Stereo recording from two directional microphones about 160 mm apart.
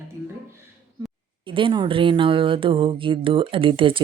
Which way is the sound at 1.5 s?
30° right (ahead or behind).